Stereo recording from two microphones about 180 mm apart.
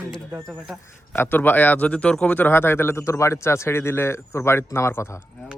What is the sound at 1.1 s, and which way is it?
Speech, 10° left (ahead or behind).